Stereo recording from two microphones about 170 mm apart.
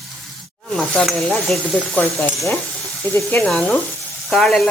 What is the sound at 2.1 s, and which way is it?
Speech, 15° left (ahead or behind).